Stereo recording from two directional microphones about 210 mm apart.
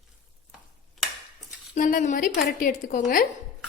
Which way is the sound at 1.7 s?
40° left (ahead or behind).